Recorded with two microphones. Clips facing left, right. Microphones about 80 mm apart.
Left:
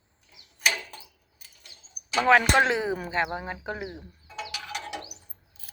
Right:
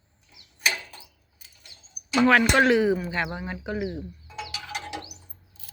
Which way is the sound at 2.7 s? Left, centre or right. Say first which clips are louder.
Right 6 dB; left.